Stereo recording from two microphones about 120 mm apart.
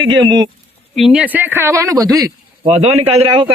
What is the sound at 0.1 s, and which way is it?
Speech, 40° right (ahead or behind).